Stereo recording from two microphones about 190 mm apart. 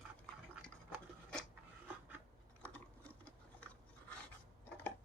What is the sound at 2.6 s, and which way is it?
Ratchet, 5° left (ahead or behind).